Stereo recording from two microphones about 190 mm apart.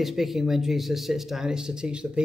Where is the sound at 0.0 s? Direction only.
Centre (ahead or behind).